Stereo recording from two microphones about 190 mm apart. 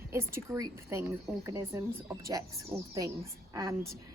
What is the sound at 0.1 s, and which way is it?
A woman's voice, 15° right (ahead or behind).